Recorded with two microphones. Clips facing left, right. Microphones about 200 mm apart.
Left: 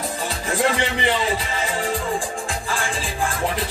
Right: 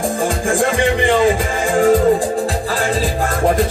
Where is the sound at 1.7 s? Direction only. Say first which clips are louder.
Right 15 dB; 45° right (ahead or behind).